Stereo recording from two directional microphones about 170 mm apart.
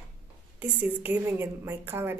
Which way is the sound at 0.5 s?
10° right (ahead or behind).